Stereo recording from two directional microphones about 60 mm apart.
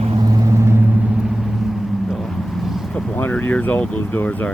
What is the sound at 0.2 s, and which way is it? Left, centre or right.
Vehicle, right.